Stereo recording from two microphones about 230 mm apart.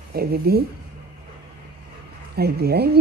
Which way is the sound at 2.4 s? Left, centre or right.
Right.